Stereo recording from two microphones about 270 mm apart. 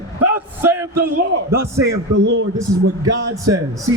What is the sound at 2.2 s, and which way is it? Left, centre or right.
Speech, right.